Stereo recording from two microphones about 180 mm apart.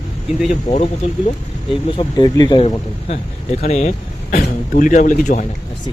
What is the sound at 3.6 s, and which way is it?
Speech, 40° left (ahead or behind).